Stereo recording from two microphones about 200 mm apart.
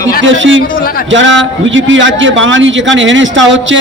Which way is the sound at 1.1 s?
70° right (ahead or behind).